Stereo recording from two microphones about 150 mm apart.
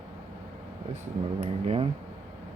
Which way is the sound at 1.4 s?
45° right (ahead or behind).